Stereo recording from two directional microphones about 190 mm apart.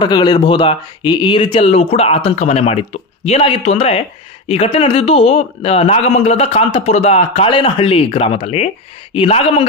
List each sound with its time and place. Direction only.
0.0 s a man's voice: 25° left (ahead or behind)